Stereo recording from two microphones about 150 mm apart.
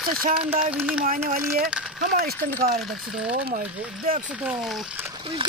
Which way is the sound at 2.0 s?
90° right.